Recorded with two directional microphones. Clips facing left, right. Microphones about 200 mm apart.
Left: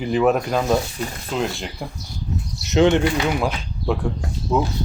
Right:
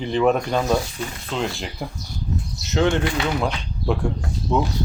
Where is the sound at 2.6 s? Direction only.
20° left (ahead or behind).